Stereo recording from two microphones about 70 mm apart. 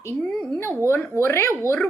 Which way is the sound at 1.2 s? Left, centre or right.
Left.